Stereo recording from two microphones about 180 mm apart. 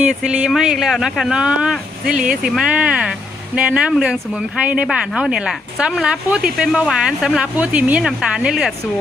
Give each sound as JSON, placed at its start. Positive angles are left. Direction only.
{"t": 0.1, "sound": "speech", "side_deg": -5}